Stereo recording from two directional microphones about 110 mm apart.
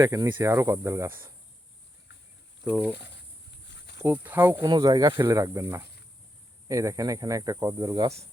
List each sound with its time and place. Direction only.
0.0 s speech: 30° right (ahead or behind)
2.6 s speech: 10° right (ahead or behind)
4.0 s speech: 15° right (ahead or behind)
4.6 s speech: 35° right (ahead or behind)